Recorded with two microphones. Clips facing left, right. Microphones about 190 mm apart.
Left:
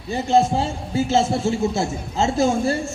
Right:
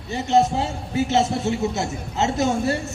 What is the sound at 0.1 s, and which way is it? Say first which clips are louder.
A man's voice: left 1 dB; 30° left (ahead or behind).